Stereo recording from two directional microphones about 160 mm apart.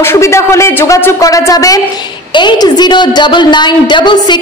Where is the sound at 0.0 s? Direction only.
15° left (ahead or behind).